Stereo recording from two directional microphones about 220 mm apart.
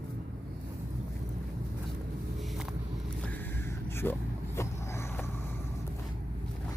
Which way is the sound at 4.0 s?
10° left (ahead or behind).